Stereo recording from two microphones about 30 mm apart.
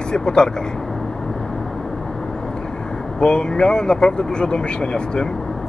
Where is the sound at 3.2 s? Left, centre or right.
Left.